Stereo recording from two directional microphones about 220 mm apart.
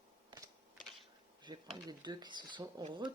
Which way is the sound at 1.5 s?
20° right (ahead or behind).